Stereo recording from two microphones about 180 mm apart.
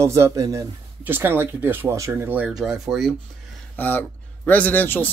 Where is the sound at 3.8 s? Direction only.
10° left (ahead or behind).